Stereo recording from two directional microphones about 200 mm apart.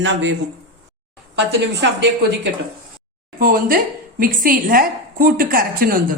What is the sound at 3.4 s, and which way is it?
A woman's voice, 45° right (ahead or behind).